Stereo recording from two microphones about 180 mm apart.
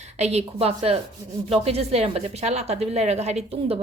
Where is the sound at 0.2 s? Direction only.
35° right (ahead or behind).